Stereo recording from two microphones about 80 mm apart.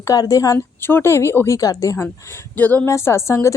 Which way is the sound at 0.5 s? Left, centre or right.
Left.